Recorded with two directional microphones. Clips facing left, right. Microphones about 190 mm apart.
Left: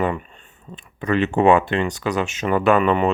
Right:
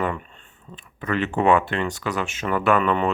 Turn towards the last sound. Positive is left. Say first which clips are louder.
# left 3 dB
turn(degrees=20)  # may be behind; listen again after turning